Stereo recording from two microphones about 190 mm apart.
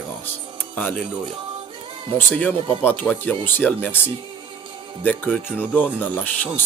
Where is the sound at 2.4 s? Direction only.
10° left (ahead or behind).